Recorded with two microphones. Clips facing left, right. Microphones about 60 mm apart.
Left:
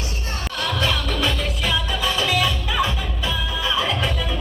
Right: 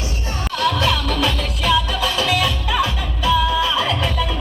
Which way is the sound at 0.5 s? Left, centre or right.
Centre.